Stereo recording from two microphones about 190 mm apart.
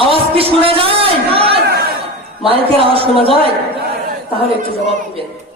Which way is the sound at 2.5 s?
30° right (ahead or behind).